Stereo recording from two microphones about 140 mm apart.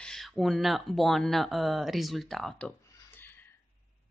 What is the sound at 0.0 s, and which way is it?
Speech, centre (ahead or behind).